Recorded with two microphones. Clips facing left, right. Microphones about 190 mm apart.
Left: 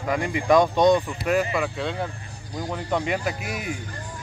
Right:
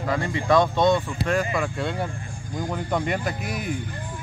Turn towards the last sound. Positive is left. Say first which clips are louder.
# even
turn(degrees=0)  # may be behind; listen again after turning